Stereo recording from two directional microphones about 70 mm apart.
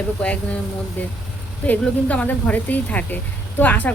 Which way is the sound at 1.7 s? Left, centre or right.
Left.